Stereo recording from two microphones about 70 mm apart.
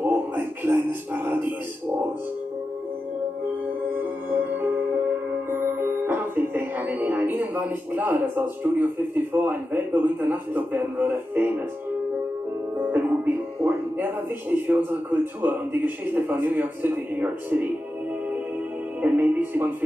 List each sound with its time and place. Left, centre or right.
0.0 s music: right
3.9 s music: right
5.5 s speech: right
12.7 s speech: right
18.9 s music: right